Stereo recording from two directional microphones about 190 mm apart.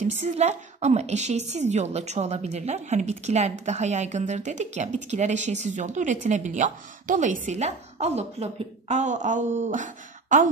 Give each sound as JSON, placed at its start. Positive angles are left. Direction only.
{"t": 0.0, "sound": "a woman's voice", "side_deg": -40}